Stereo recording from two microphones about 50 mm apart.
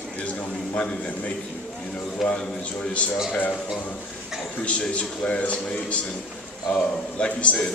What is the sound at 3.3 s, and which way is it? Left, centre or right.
Speech, left.